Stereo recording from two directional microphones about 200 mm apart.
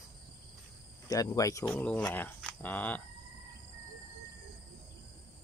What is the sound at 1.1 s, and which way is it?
Speech, 15° left (ahead or behind).